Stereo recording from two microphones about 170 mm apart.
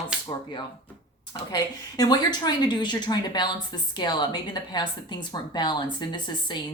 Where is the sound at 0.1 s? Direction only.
5° right (ahead or behind).